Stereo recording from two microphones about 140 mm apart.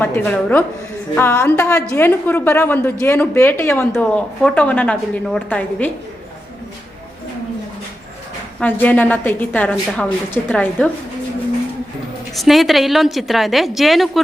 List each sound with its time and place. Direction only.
0.0 s a woman's voice: 15° left (ahead or behind)
1.1 s a woman's voice: 15° left (ahead or behind)
8.6 s a woman's voice: 15° left (ahead or behind)
12.4 s a woman's voice: centre (ahead or behind)